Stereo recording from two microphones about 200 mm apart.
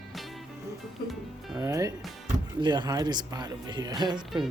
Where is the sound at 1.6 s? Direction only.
15° right (ahead or behind).